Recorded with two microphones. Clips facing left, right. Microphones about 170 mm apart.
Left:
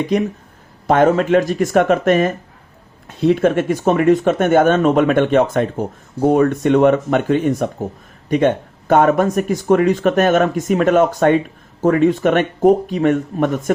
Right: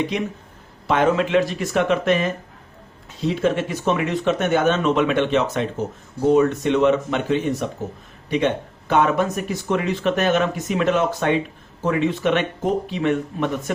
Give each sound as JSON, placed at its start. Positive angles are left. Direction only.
{"t": 0.9, "sound": "speech", "side_deg": 45}